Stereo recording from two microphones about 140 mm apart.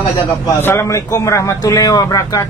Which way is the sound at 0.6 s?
15° left (ahead or behind).